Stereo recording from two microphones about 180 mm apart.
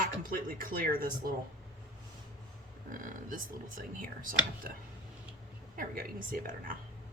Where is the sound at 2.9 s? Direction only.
50° right (ahead or behind).